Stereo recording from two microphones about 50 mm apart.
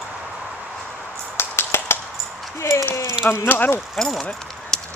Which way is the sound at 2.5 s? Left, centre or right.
Left.